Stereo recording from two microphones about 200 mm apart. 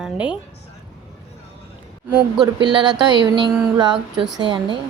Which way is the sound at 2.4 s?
20° right (ahead or behind).